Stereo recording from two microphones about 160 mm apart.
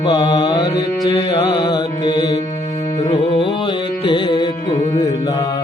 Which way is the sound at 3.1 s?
40° left (ahead or behind).